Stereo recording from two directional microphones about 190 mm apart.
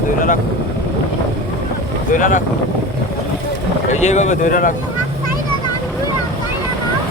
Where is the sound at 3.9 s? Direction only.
40° left (ahead or behind).